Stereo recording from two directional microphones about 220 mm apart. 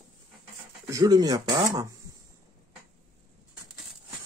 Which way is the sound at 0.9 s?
15° right (ahead or behind).